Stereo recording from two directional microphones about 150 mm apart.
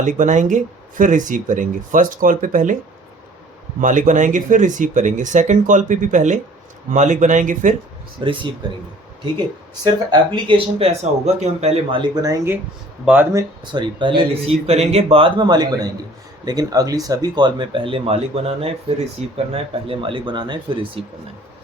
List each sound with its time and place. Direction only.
0.0 s speech: 55° right (ahead or behind)
3.8 s speech: 60° right (ahead or behind)
8.2 s speech: 35° right (ahead or behind)
13.1 s speech: 15° right (ahead or behind)
13.7 s speech: 30° right (ahead or behind)